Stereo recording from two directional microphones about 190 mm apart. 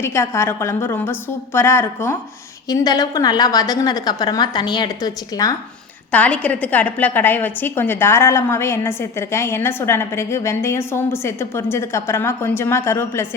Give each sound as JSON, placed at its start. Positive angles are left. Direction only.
{"t": 0.0, "sound": "a woman's voice", "side_deg": 15}
{"t": 6.1, "sound": "a woman's voice", "side_deg": 5}